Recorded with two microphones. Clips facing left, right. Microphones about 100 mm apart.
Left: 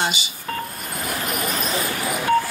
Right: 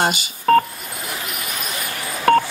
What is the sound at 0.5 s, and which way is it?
Telephone dialing, 60° right (ahead or behind).